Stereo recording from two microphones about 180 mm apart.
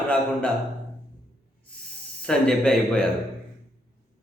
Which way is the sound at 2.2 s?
5° left (ahead or behind).